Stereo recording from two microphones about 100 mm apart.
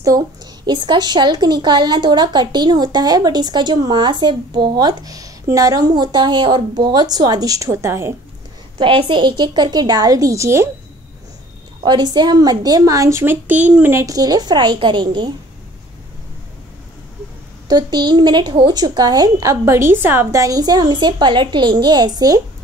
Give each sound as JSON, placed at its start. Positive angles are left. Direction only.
{"t": 0.7, "sound": "speech", "side_deg": -50}
{"t": 8.7, "sound": "speech", "side_deg": -55}
{"t": 11.8, "sound": "a woman's voice", "side_deg": -45}
{"t": 13.9, "sound": "speech", "side_deg": -35}
{"t": 17.6, "sound": "speech", "side_deg": -45}